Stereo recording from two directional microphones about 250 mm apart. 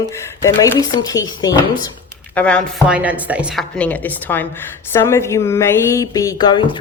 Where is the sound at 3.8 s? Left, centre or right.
Centre.